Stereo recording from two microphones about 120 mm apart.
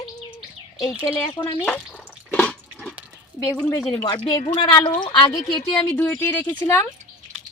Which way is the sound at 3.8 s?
30° left (ahead or behind).